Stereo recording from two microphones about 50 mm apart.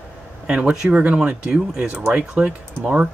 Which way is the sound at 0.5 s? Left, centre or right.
Right.